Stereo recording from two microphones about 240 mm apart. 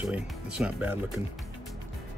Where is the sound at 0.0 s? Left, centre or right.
Centre.